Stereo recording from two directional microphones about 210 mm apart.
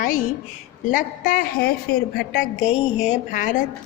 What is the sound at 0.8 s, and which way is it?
A woman's voice, 40° left (ahead or behind).